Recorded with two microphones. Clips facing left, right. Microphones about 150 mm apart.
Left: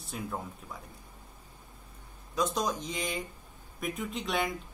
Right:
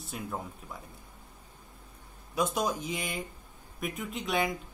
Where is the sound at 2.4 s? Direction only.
10° right (ahead or behind).